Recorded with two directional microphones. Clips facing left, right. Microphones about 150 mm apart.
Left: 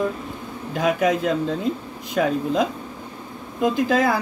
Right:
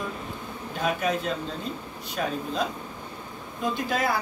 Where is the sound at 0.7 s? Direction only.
90° left.